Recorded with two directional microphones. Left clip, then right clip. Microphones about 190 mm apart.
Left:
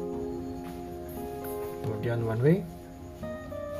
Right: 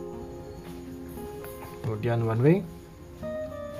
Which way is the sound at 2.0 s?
30° right (ahead or behind).